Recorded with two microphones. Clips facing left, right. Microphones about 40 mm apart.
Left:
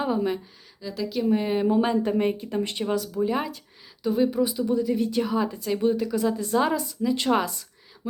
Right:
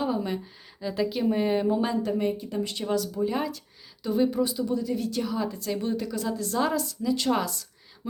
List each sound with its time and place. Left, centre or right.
0.0 s a sound: centre
0.8 s speech: centre
1.2 s speech: centre
1.5 s a woman's voice: centre
1.8 s a woman's voice: left
2.1 s speech: left
2.8 s a woman's voice: centre
4.9 s a woman's voice: left